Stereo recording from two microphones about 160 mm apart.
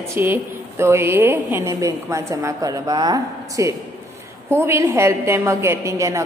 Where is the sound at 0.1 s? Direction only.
15° right (ahead or behind).